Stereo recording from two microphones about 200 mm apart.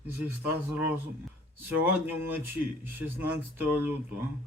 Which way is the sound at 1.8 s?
10° right (ahead or behind).